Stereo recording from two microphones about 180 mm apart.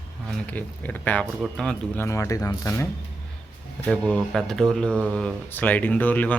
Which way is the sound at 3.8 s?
5° left (ahead or behind).